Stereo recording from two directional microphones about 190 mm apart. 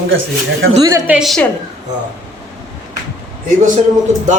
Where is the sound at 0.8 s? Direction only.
15° right (ahead or behind).